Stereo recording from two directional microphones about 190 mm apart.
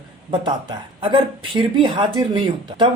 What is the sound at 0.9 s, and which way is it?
Speech, 25° right (ahead or behind).